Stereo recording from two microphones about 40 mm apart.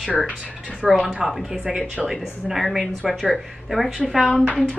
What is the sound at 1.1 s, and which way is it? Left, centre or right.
A woman's voice, centre.